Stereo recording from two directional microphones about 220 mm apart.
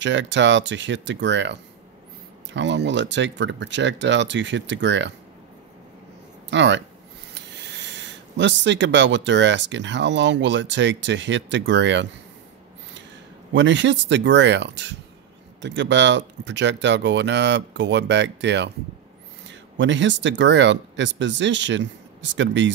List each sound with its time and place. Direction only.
0.0 s speech: 55° right (ahead or behind)
6.5 s speech: 55° right (ahead or behind)
13.5 s speech: 55° right (ahead or behind)